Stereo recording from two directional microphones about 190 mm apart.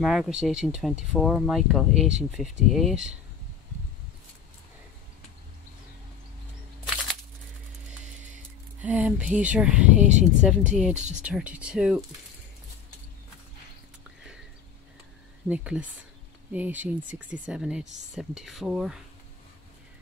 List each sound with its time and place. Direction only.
0.0 s speech: centre (ahead or behind)
8.4 s speech: 10° right (ahead or behind)
9.9 s speech: 40° right (ahead or behind)
10.7 s speech: 5° right (ahead or behind)
11.0 s speech: 40° right (ahead or behind)
11.2 s speech: 5° right (ahead or behind)
15.4 s speech: 5° right (ahead or behind)